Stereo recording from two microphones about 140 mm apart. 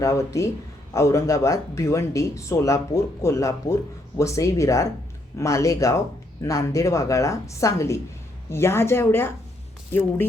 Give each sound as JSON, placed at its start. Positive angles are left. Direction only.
{"t": 0.0, "sound": "speech", "side_deg": 20}